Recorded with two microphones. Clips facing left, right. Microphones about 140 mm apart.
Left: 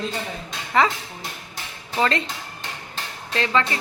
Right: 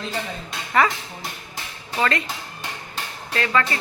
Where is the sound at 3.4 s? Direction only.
20° left (ahead or behind).